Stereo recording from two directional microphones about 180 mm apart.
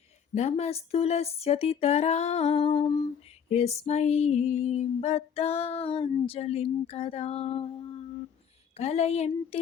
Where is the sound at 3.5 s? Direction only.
35° left (ahead or behind).